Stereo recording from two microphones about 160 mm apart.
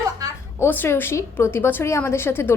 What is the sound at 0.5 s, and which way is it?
A woman's voice, 15° left (ahead or behind).